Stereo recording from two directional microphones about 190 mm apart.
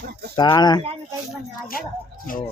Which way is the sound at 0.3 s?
20° left (ahead or behind).